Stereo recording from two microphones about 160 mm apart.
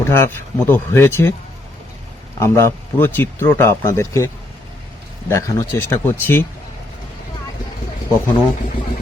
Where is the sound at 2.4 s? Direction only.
15° left (ahead or behind).